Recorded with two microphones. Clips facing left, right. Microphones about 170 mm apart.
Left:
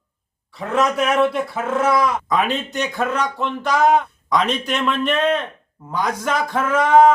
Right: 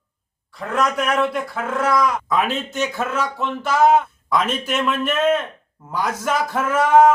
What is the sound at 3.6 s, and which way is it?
A man's voice, 5° right (ahead or behind).